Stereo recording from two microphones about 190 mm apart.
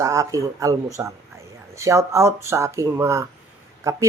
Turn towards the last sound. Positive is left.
turn(degrees=-15)  # may be behind; listen again after turning